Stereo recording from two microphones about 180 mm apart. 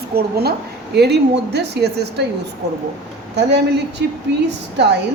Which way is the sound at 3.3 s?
70° right (ahead or behind).